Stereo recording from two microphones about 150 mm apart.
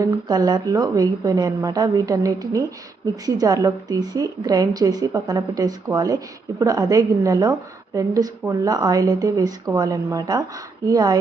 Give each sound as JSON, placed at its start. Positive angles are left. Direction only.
{"t": 0.0, "sound": "a woman's voice", "side_deg": -25}